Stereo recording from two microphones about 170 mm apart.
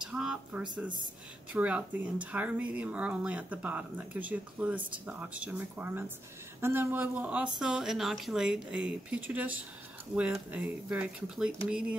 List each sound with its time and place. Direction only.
0.0 s speech: 5° right (ahead or behind)